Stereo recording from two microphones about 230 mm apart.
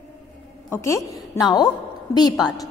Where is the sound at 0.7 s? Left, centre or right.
Centre.